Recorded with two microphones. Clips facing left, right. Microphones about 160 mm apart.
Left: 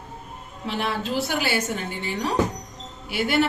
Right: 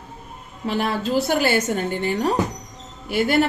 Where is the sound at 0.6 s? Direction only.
45° right (ahead or behind).